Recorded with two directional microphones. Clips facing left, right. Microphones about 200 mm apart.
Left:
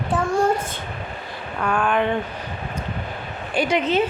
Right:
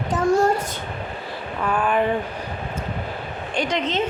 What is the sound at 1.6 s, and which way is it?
Speech, 5° right (ahead or behind).